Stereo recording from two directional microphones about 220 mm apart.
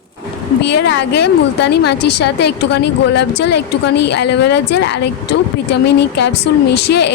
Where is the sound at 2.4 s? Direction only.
50° left (ahead or behind).